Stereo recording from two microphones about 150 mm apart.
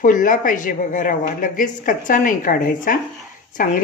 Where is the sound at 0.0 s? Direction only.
60° left (ahead or behind).